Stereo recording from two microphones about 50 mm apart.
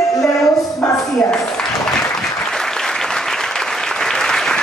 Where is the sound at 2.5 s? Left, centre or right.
Centre.